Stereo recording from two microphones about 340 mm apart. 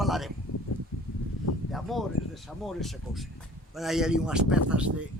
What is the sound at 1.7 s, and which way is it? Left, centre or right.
Speech, centre.